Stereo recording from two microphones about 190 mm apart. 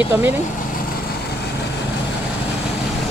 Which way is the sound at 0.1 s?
10° right (ahead or behind).